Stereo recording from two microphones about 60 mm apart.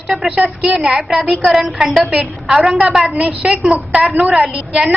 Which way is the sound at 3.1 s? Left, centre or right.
Right.